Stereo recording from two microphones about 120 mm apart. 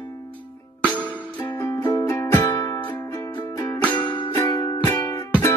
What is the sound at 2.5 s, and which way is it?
Music, 40° left (ahead or behind).